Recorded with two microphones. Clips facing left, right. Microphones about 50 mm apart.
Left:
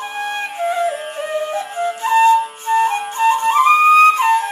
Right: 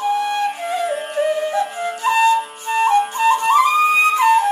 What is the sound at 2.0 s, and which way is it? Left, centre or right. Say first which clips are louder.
Flute: left 3 dB; left.